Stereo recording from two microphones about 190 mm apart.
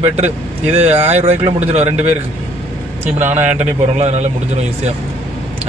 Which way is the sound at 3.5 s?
35° right (ahead or behind).